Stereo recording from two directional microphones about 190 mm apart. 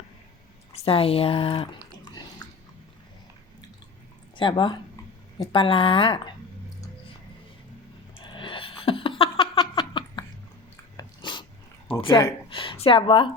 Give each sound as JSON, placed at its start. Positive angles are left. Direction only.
{"t": 0.7, "sound": "speech", "side_deg": 30}
{"t": 4.4, "sound": "a woman's voice", "side_deg": 25}
{"t": 8.2, "sound": "a sound", "side_deg": 25}
{"t": 10.9, "sound": "dog", "side_deg": 25}
{"t": 11.9, "sound": "a woman's voice", "side_deg": 25}